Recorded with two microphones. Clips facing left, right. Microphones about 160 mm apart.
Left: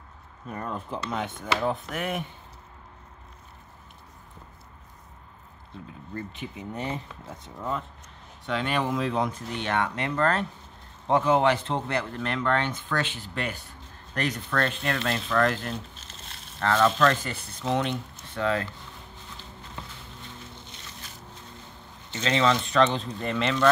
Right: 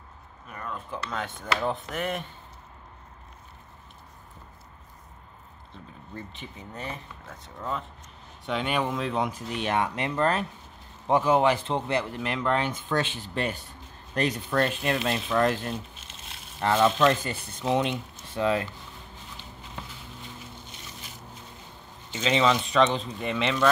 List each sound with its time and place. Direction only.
0.5 s speech: 35° left (ahead or behind); by 1.5 s 15° left (ahead or behind)
1.6 s speech: 5° left (ahead or behind)
6.4 s speech: 15° left (ahead or behind)
7.2 s speech: 10° left (ahead or behind)
8.5 s speech: 5° right (ahead or behind)
9.6 s speech: 15° right (ahead or behind)
16.8 s speech: 5° right (ahead or behind)
22.1 s speech: 15° right (ahead or behind)